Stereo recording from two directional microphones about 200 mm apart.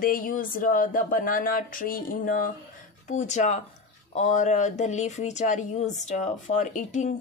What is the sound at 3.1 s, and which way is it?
Speech, 35° left (ahead or behind).